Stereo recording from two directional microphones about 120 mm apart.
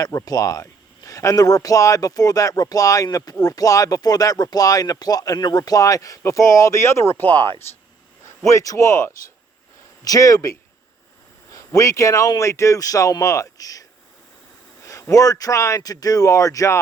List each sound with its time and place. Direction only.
0.0 s speech: 30° left (ahead or behind)
8.4 s speech: 25° left (ahead or behind)
11.5 s speech: 30° left (ahead or behind)
14.8 s speech: 25° left (ahead or behind)